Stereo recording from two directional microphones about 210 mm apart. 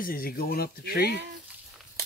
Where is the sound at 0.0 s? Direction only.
45° left (ahead or behind).